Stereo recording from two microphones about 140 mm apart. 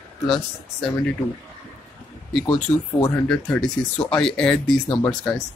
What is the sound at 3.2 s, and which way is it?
Speech, 5° left (ahead or behind).